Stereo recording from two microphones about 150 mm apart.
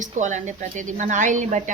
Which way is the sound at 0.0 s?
55° right (ahead or behind).